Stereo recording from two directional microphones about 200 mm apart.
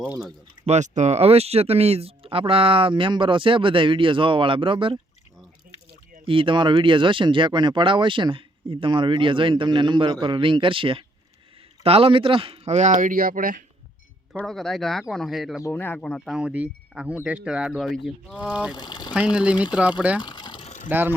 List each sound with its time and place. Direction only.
0.1 s speech: 5° right (ahead or behind)
0.6 s speech: 35° right (ahead or behind)
6.2 s speech: 25° right (ahead or behind); by 13.7 s 45° right (ahead or behind)
14.3 s speech: centre (ahead or behind)
15.6 s speech: 10° left (ahead or behind); by 18.7 s 5° right (ahead or behind)
18.7 s speech: 20° left (ahead or behind)
19.1 s speech: 5° right (ahead or behind)
20.2 s water: 20° left (ahead or behind)